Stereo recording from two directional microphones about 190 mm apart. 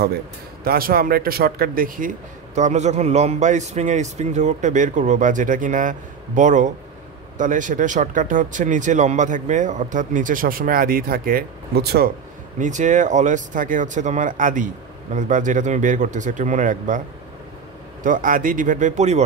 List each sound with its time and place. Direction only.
0.7 s speech: 50° right (ahead or behind)
12.5 s speech: 40° right (ahead or behind)
18.0 s speech: 45° right (ahead or behind)